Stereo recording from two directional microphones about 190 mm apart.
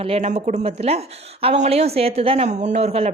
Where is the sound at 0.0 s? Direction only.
35° right (ahead or behind).